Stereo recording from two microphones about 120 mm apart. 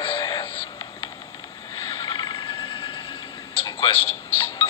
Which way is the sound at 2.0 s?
40° left (ahead or behind).